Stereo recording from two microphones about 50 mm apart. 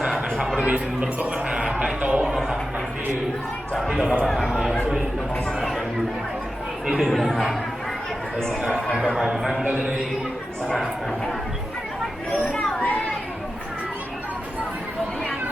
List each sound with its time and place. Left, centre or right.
0.3 s music: centre
0.6 s a man's voice: right
3.8 s a man's voice: centre
4.0 s speech: centre
5.5 s chatter: centre
6.8 s speech: centre
7.1 s a man's voice: centre
9.1 s a man's voice: centre
12.3 s a child's voice: left